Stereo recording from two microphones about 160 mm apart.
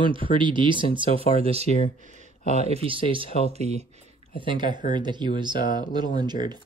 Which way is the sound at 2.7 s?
35° right (ahead or behind).